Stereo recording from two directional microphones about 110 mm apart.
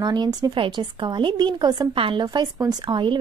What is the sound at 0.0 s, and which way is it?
A woman's voice, 40° right (ahead or behind).